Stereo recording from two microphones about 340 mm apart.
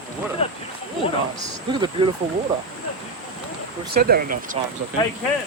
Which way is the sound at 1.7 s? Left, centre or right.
Centre.